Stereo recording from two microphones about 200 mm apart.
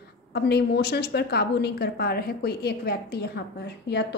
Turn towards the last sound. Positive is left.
turn(degrees=60)  # may be behind; listen again after turning